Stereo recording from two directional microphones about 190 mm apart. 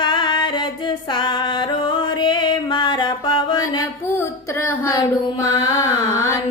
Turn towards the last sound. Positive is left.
turn(degrees=15)  # may be behind; listen again after turning